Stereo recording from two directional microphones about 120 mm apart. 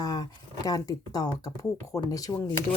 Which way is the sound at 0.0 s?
30° left (ahead or behind).